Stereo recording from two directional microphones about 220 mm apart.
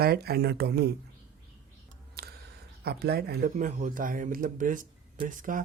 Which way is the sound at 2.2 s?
45° right (ahead or behind).